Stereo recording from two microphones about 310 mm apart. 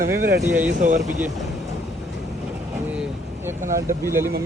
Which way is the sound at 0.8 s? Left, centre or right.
Right.